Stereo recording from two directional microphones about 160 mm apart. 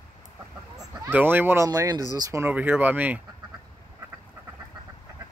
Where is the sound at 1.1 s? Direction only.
10° right (ahead or behind).